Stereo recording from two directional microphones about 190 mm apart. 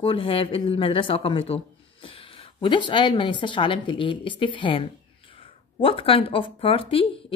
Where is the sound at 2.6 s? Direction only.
25° left (ahead or behind).